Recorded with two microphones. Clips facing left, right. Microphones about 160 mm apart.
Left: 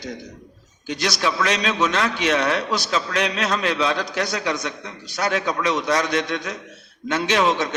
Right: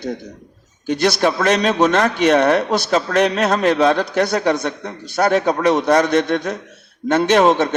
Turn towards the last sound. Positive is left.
turn(degrees=-50)  # may be behind; listen again after turning